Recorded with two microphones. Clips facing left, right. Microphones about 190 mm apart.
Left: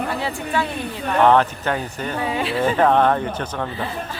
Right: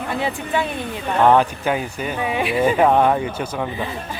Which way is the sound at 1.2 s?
10° right (ahead or behind).